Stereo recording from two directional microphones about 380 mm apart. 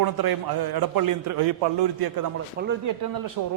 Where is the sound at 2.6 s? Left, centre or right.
Right.